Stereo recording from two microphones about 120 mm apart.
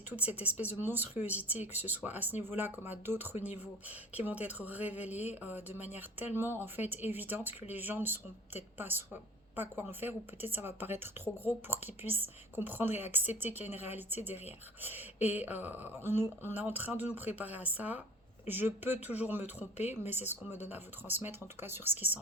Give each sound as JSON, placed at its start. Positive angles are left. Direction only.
{"t": 0.1, "sound": "speech", "side_deg": -15}
{"t": 14.8, "sound": "speech", "side_deg": -15}